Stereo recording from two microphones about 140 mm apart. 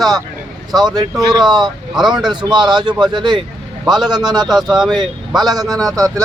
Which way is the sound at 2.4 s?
30° right (ahead or behind).